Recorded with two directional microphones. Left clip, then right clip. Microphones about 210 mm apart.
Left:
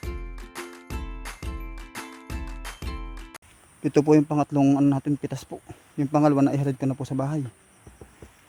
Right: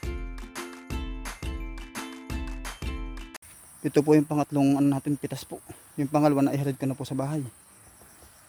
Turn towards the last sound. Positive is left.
turn(degrees=15)  # may be behind; listen again after turning